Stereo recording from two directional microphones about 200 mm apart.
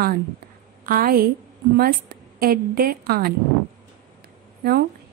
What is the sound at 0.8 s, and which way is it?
A woman's voice, 45° right (ahead or behind).